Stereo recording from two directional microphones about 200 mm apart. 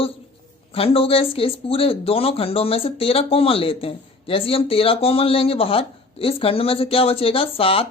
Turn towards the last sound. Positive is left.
turn(degrees=25)  # may be behind; listen again after turning